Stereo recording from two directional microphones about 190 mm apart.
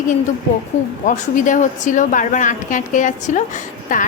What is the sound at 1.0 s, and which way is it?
A woman's voice, 40° left (ahead or behind).